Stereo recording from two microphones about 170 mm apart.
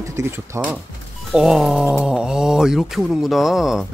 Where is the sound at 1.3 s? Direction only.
5° right (ahead or behind).